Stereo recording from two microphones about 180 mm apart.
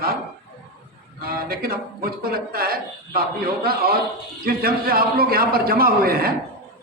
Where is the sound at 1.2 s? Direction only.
55° right (ahead or behind).